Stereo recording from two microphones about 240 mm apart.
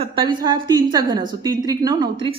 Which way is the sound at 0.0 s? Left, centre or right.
Centre.